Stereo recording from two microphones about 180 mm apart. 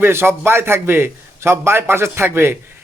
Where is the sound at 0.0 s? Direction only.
15° right (ahead or behind).